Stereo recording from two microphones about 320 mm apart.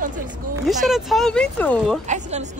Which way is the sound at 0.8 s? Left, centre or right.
Centre.